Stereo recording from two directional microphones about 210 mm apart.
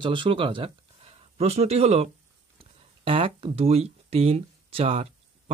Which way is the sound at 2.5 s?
25° right (ahead or behind).